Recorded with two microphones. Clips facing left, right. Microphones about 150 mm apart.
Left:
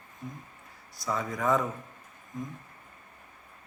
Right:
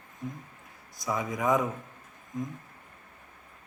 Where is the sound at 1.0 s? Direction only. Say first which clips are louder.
Right 1 dB; 15° right (ahead or behind).